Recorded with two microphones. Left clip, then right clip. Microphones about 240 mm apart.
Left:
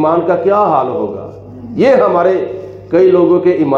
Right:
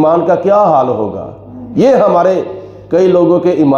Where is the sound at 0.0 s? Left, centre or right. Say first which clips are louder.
Right 2 dB; right.